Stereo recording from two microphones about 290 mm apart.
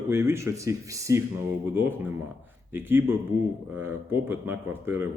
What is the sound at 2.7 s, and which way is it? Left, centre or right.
Speech, centre.